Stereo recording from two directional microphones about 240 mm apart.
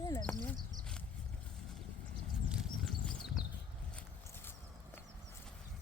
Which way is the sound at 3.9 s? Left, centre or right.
Centre.